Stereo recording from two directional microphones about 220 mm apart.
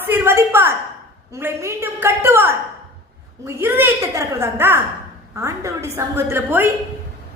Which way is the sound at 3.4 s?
10° right (ahead or behind).